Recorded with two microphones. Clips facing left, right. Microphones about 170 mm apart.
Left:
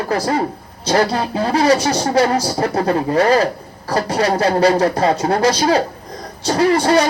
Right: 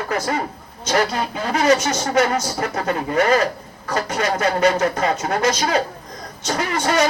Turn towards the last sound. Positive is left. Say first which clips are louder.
# left 6 dB
turn(degrees=35)  # may be behind; listen again after turning